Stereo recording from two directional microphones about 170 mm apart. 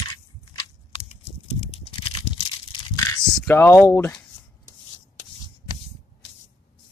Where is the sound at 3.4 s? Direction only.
15° left (ahead or behind).